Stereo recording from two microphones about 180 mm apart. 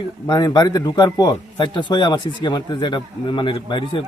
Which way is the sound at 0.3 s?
20° left (ahead or behind).